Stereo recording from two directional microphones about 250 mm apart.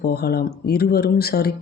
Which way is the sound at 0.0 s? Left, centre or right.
Left.